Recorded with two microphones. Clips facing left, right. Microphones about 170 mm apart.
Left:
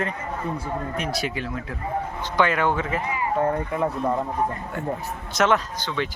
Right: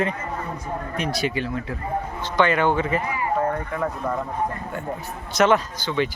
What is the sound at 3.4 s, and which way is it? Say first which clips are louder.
Speech: left 1 dB; 20° left (ahead or behind).